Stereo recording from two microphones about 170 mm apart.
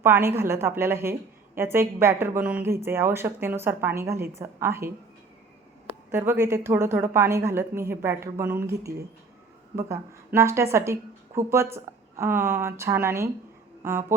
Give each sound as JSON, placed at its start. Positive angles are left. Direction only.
{"t": 0.0, "sound": "a woman's voice", "side_deg": -15}
{"t": 5.9, "sound": "a woman's voice", "side_deg": -15}